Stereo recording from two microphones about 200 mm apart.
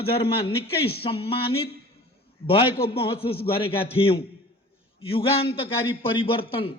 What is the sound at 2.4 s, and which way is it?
A man's voice, 25° left (ahead or behind).